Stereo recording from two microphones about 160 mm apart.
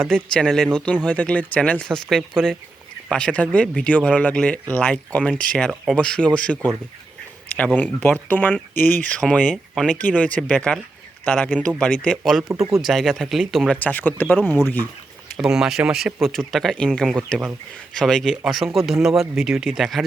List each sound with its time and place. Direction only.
0.1 s speech: 5° left (ahead or behind)
7.8 s speech: 10° left (ahead or behind)
8.7 s speech: 65° left (ahead or behind)
9.0 s speech: 5° left (ahead or behind)
13.7 s speech: 10° left (ahead or behind)
15.4 s speech: 5° right (ahead or behind)